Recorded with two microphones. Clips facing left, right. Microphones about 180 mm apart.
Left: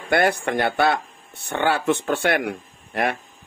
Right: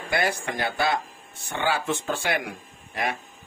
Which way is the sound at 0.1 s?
60° left (ahead or behind).